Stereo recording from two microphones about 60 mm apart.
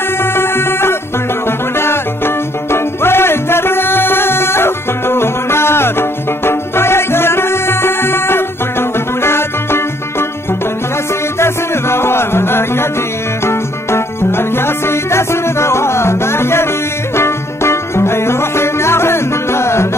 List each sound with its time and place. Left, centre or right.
0.2 s music: left
11.3 s music: left